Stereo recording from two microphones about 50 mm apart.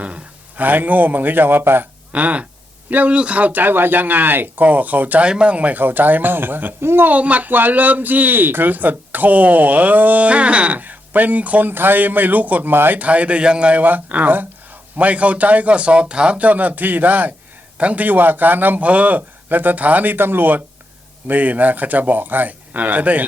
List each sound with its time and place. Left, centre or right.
0.0 s a man's voice: right
2.1 s a man's voice: right
5.2 s a man's voice: right
7.1 s speech: right
11.7 s speech: right
12.7 s speech: right
13.0 s a man's voice: right
13.8 s a man's voice: right
21.2 s speech: right